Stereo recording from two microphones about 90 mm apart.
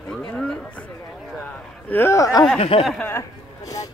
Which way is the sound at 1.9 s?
25° left (ahead or behind).